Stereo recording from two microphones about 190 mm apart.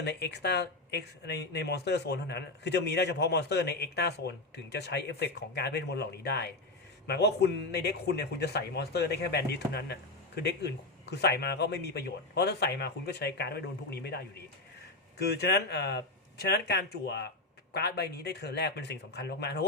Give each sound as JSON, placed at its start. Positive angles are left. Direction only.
{"t": 0.0, "sound": "speech", "side_deg": 60}
{"t": 15.2, "sound": "speech", "side_deg": 60}